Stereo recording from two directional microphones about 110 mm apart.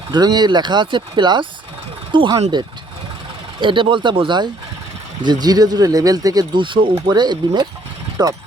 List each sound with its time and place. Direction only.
0.1 s speech: 40° right (ahead or behind)
3.6 s speech: 50° right (ahead or behind)